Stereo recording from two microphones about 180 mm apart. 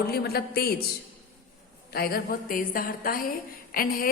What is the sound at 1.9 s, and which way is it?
A woman's voice, 55° left (ahead or behind).